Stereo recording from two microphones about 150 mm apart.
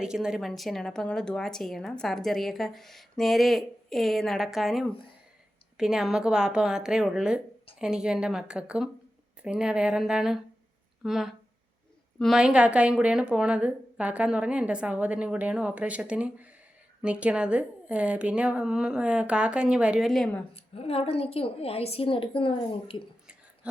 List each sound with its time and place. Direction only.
0.0 s a woman's voice: 5° right (ahead or behind)
20.5 s a woman's voice: 40° left (ahead or behind)